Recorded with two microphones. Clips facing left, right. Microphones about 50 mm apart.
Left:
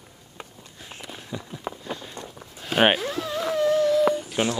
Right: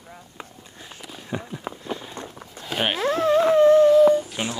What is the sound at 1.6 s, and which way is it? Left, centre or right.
Run, centre.